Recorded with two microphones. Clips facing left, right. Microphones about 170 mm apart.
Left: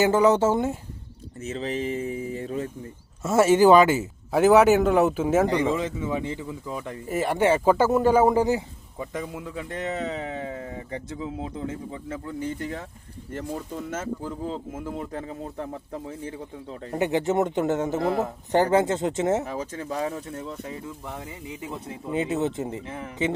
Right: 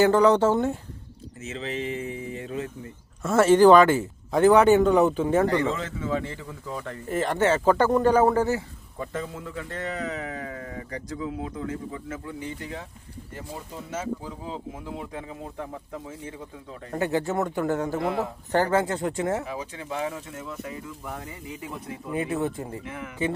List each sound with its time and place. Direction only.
0.0 s speech: 5° left (ahead or behind)
1.4 s speech: 40° left (ahead or behind)
3.2 s speech: 10° left (ahead or behind)
5.5 s speech: 20° left (ahead or behind); by 12.8 s 50° left (ahead or behind)
14.8 s speech: 45° left (ahead or behind)
16.9 s speech: 20° left (ahead or behind)
19.5 s speech: 45° left (ahead or behind)
21.2 s speech: 20° left (ahead or behind)